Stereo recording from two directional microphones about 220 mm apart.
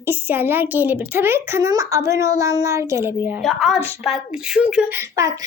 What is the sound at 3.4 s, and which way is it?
A woman's voice, centre (ahead or behind).